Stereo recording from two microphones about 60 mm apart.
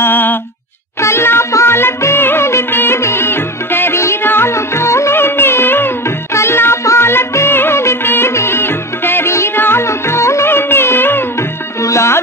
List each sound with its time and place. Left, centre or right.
0.0 s music: left
5.2 s music: left
11.8 s music: left